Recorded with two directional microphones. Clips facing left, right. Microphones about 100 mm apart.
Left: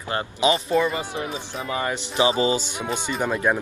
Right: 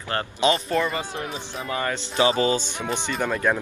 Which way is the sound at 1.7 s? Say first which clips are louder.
Left 1 dB; 15° left (ahead or behind).